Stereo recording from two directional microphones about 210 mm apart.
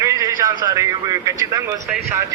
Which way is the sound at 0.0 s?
15° right (ahead or behind).